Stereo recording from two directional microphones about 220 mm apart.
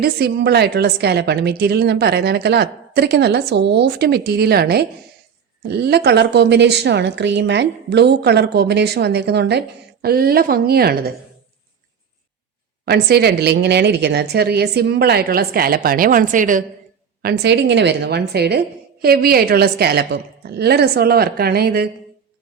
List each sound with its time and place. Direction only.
0.0 s a woman's voice: 45° right (ahead or behind)
12.8 s a woman's voice: 45° right (ahead or behind)
17.2 s a woman's voice: 50° right (ahead or behind)